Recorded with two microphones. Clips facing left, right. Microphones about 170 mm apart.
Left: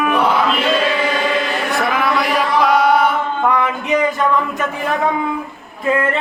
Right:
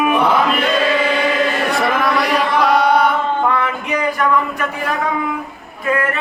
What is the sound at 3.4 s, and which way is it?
Speech, 15° left (ahead or behind).